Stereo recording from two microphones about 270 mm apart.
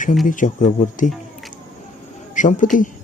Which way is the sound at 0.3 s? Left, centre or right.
Left.